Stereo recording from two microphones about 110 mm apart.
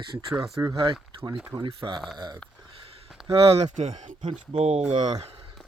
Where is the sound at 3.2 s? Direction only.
60° right (ahead or behind); by 4.8 s 90° right.